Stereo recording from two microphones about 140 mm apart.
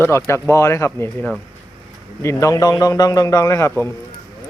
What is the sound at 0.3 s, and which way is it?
Speech, 20° left (ahead or behind).